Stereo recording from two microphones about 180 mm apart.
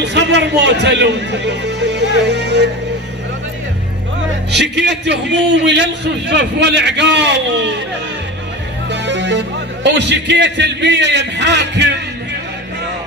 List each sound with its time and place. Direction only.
0.0 s a man's voice: 70° right (ahead or behind)
4.5 s a man's voice: 70° right (ahead or behind)
8.9 s speech: 75° right (ahead or behind)